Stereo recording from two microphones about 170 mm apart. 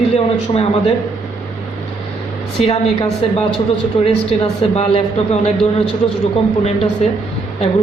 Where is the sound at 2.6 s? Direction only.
35° left (ahead or behind).